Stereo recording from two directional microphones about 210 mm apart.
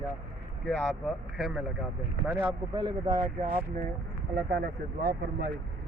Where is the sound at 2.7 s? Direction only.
20° right (ahead or behind).